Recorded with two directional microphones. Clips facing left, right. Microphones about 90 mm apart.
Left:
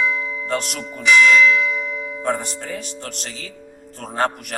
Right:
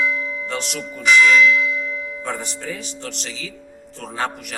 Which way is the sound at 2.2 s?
50° left (ahead or behind).